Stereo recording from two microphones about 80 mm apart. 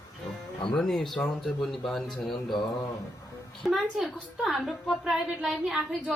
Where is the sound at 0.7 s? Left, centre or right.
Centre.